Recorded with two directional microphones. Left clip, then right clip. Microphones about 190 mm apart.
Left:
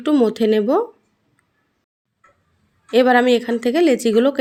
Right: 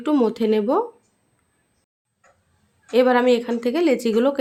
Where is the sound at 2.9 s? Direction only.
15° left (ahead or behind).